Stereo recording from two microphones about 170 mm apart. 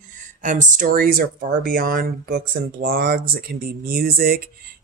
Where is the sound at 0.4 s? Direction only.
45° right (ahead or behind).